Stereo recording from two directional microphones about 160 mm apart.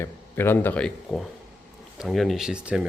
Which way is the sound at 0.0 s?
15° left (ahead or behind).